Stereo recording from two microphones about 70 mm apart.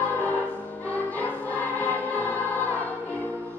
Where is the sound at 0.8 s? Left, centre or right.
Left.